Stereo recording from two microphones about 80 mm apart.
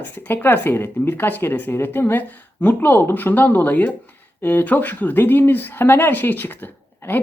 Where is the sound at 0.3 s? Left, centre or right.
Left.